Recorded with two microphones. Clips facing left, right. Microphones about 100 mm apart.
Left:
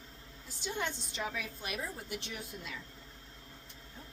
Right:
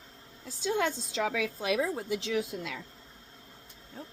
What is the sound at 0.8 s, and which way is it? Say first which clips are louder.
A woman's voice: right 6 dB; 90° right.